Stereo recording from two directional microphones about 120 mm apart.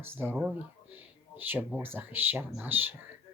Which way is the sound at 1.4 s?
15° right (ahead or behind).